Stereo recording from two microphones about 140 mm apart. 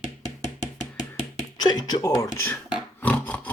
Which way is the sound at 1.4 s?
30° left (ahead or behind).